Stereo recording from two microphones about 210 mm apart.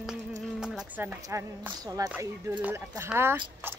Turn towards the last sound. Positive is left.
turn(degrees=-10)  # may be behind; listen again after turning